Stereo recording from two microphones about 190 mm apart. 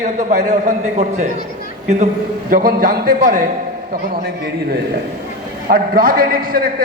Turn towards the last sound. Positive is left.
turn(degrees=-50)  # may be behind; listen again after turning